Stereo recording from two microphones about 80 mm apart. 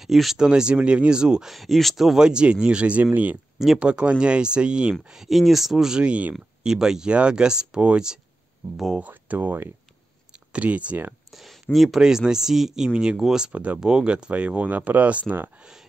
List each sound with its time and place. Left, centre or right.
0.0 s speech: centre; by 3.3 s right
3.5 s speech: centre
9.0 s speech: centre
11.3 s speech: centre; by 15.5 s right